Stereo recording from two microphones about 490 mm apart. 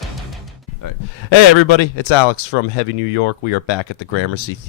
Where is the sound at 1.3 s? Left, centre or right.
Left.